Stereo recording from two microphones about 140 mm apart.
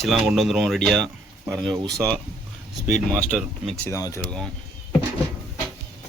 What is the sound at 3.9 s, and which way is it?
Speech, 20° left (ahead or behind).